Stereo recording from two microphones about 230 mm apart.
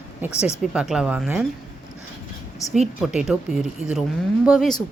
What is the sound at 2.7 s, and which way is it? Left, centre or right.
Speech, centre.